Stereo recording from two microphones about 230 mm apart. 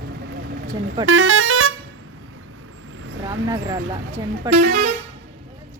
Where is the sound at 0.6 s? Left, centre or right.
Right.